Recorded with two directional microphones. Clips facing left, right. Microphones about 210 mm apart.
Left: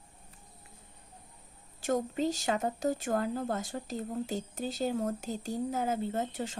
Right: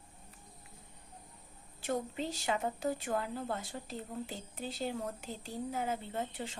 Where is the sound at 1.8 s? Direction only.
45° left (ahead or behind).